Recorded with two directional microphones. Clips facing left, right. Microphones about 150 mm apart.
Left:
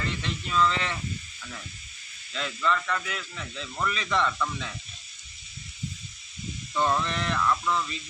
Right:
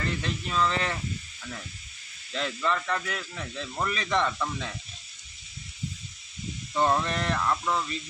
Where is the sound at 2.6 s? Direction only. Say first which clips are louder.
Left 2 dB; 30° right (ahead or behind).